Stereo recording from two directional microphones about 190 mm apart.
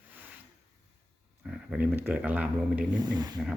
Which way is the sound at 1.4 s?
5° right (ahead or behind).